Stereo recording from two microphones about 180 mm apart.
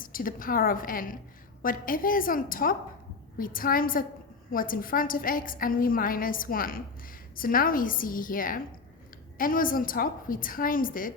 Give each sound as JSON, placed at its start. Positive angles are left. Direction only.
{"t": 0.0, "sound": "a woman's voice", "side_deg": 50}